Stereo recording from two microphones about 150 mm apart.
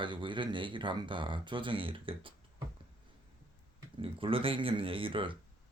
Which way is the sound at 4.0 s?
35° right (ahead or behind).